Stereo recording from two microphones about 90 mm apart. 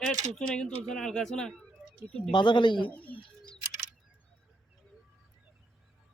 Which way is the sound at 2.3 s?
60° left (ahead or behind).